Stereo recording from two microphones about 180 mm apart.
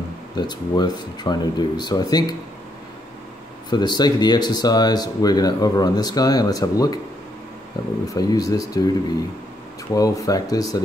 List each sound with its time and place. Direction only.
0.4 s speech: 25° left (ahead or behind)
3.7 s speech: 25° left (ahead or behind)
8.1 s speech: 20° left (ahead or behind)
9.9 s speech: 20° left (ahead or behind)